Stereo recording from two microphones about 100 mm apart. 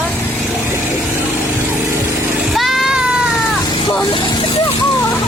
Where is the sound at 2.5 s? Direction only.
Centre (ahead or behind).